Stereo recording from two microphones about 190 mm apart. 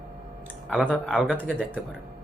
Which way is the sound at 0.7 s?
5° left (ahead or behind).